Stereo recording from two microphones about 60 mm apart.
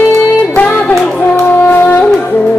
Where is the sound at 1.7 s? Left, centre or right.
Left.